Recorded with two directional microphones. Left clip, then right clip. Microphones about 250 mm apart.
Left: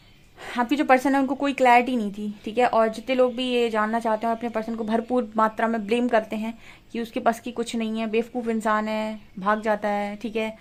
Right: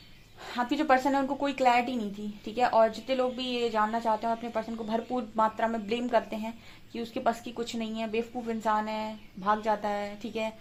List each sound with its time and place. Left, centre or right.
0.5 s a woman's voice: left